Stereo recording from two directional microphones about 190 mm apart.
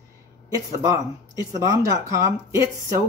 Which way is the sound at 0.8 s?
15° right (ahead or behind).